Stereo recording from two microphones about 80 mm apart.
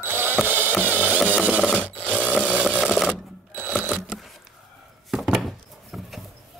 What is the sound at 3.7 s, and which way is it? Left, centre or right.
Camera, centre.